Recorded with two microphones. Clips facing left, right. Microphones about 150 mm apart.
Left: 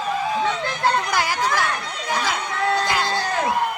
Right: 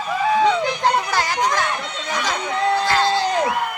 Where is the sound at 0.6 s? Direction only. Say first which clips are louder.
Right 2 dB; 15° right (ahead or behind).